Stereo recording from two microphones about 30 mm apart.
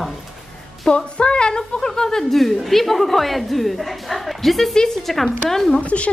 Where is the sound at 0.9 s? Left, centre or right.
Left.